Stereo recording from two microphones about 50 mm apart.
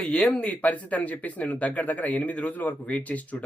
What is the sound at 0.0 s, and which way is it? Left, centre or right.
Speech, left.